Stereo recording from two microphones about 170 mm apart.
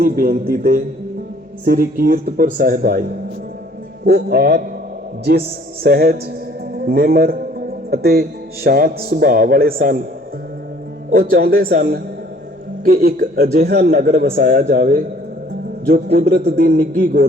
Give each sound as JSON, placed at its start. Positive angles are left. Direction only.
{"t": 0.0, "sound": "speech", "side_deg": -55}
{"t": 4.0, "sound": "a man's voice", "side_deg": -70}
{"t": 5.8, "sound": "speech", "side_deg": -60}
{"t": 11.1, "sound": "speech", "side_deg": -60}
{"t": 16.2, "sound": "speech", "side_deg": -70}